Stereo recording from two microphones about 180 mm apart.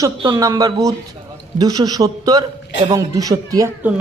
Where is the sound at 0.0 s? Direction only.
20° right (ahead or behind).